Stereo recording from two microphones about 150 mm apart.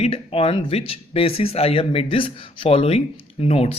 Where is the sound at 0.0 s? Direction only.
40° left (ahead or behind).